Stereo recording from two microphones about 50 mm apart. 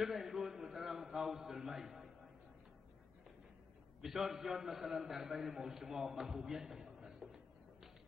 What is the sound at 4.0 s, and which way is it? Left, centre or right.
A man's voice, centre.